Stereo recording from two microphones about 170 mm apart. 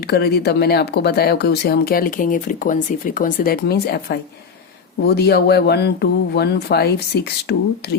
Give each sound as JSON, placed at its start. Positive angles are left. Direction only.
{"t": 0.1, "sound": "speech", "side_deg": 75}